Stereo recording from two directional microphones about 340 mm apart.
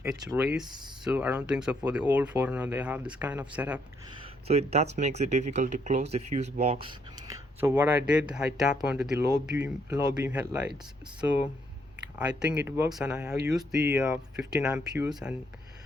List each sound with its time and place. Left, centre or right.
0.0 s speech: centre
4.4 s speech: centre
12.4 s speech: centre